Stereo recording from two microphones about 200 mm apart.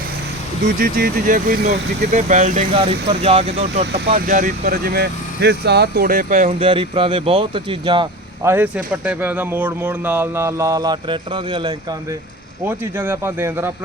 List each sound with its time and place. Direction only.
0.8 s speech: 45° right (ahead or behind); by 3.8 s 30° right (ahead or behind)
3.9 s speech: 45° right (ahead or behind); by 8.0 s 25° right (ahead or behind)
8.4 s a man's voice: 10° right (ahead or behind); by 11.7 s 25° right (ahead or behind)
12.6 s a man's voice: 10° right (ahead or behind)